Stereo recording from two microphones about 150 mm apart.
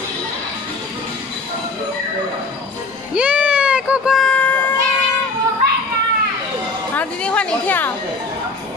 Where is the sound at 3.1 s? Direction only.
10° right (ahead or behind); by 4.7 s 10° left (ahead or behind).